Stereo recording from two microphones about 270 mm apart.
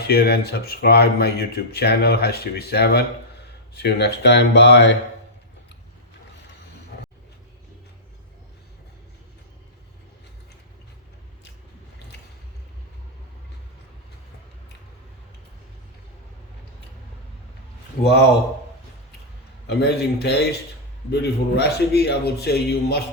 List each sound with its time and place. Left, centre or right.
0.1 s speech: left
18.0 s speech: left
19.6 s speech: left